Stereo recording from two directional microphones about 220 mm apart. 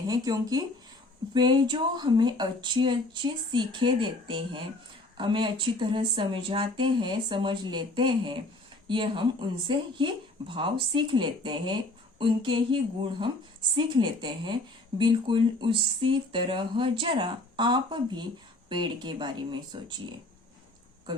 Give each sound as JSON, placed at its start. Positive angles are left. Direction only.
{"t": 0.1, "sound": "speech", "side_deg": -15}
{"t": 13.7, "sound": "speech", "side_deg": -20}